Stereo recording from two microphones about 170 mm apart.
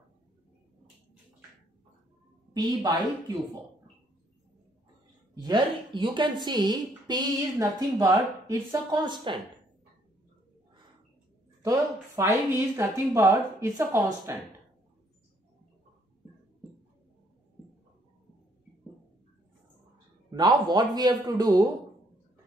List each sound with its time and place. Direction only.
2.5 s a woman's voice: 25° right (ahead or behind)
5.3 s a woman's voice: 25° right (ahead or behind)
12.2 s a woman's voice: 20° right (ahead or behind)
20.2 s a woman's voice: 25° right (ahead or behind)